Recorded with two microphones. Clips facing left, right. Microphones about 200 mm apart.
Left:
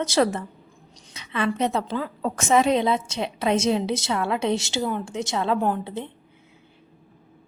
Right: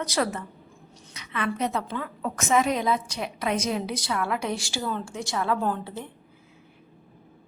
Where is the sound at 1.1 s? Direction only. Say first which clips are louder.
Left 4 dB; 30° left (ahead or behind).